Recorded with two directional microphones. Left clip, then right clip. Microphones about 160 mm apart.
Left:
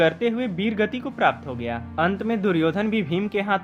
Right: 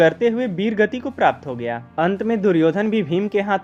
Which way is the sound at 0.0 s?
35° right (ahead or behind).